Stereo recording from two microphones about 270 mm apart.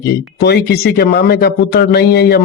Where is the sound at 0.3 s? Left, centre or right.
Left.